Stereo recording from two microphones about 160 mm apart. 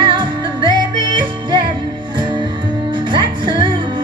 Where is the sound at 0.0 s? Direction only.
30° right (ahead or behind).